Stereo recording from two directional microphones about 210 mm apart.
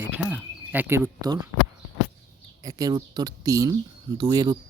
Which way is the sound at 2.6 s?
15° right (ahead or behind).